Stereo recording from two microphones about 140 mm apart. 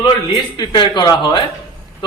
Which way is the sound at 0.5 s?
35° left (ahead or behind).